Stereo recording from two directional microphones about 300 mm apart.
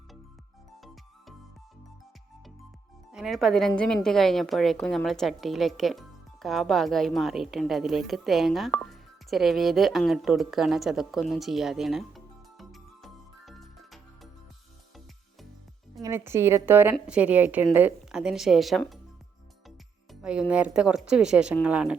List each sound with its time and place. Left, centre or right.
3.1 s a woman's voice: centre
16.0 s a woman's voice: centre